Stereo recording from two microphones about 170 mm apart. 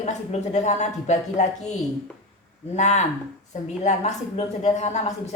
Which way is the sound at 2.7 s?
40° left (ahead or behind).